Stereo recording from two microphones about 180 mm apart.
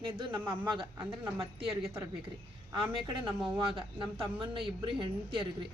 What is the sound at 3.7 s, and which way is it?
Speech, 30° right (ahead or behind).